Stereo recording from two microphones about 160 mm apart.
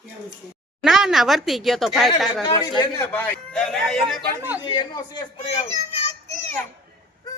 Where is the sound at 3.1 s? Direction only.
10° left (ahead or behind).